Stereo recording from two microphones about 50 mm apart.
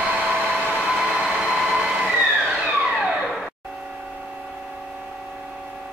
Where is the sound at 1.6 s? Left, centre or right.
Centre.